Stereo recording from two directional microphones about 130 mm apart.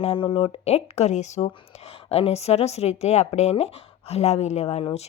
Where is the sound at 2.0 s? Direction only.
50° left (ahead or behind).